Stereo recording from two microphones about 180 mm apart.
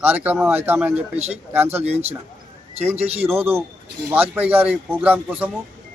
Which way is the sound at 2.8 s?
10° right (ahead or behind).